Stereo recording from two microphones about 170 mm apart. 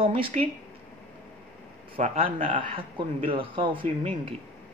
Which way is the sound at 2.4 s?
30° right (ahead or behind).